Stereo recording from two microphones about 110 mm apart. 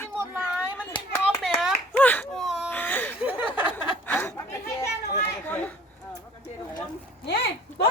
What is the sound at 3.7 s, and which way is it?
Chuckle, 20° left (ahead or behind).